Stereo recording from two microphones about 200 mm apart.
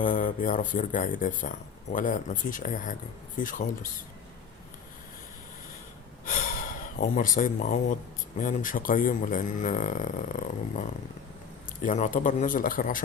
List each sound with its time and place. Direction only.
0.0 s speech: 40° left (ahead or behind)
6.2 s gasp: 45° left (ahead or behind)
8.4 s speech: 40° left (ahead or behind)